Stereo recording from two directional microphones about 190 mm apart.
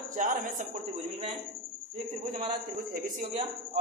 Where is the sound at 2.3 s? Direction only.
45° right (ahead or behind).